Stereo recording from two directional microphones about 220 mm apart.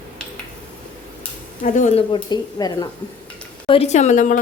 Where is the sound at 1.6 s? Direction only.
35° left (ahead or behind).